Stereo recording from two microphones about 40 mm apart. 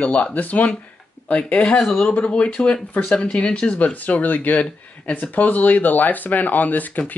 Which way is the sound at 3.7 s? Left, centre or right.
Left.